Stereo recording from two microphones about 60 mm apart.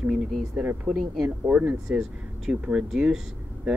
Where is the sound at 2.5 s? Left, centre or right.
Centre.